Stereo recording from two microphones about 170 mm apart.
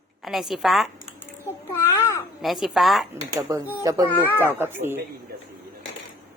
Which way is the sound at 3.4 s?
15° right (ahead or behind).